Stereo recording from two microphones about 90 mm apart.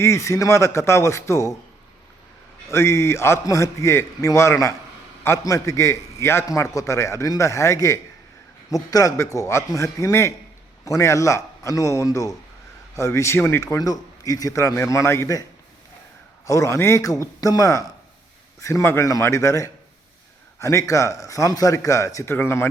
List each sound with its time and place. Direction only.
0.0 s a man's voice: 35° left (ahead or behind)
2.6 s a man's voice: 30° left (ahead or behind)
13.7 s a man's voice: 45° left (ahead or behind)
16.5 s a man's voice: 35° left (ahead or behind)